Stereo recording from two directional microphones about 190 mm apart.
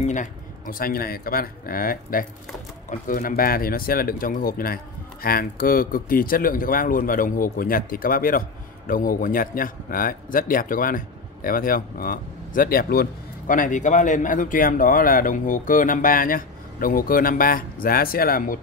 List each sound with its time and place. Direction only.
0.0 s speech: 40° left (ahead or behind)